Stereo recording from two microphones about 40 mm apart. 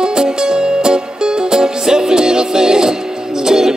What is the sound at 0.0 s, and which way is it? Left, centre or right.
Music, centre.